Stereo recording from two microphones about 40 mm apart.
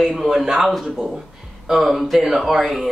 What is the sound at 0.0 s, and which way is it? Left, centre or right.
Speech, centre.